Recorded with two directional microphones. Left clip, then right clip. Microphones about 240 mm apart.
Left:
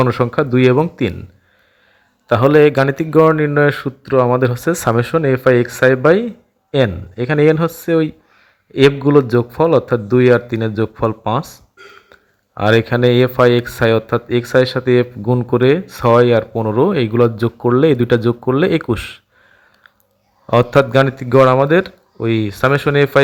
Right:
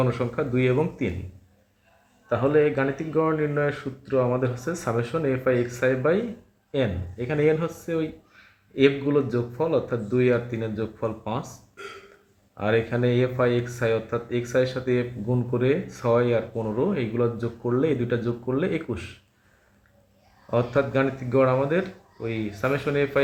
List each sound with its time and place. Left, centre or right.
0.0 s speech: left
2.3 s speech: left
12.5 s speech: left
20.5 s speech: left